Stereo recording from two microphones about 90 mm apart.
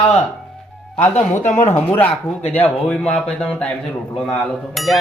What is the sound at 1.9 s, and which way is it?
Speech, 15° left (ahead or behind).